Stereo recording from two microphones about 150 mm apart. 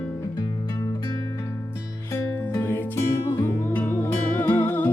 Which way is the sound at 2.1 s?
15° left (ahead or behind).